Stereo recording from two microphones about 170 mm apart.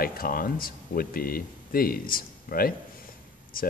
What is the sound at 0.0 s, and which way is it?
Speech, 60° left (ahead or behind).